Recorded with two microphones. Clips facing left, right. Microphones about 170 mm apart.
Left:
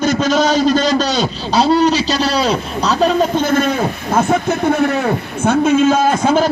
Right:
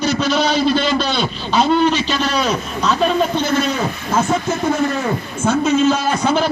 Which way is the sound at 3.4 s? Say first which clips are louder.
Left 3 dB; 50° left (ahead or behind).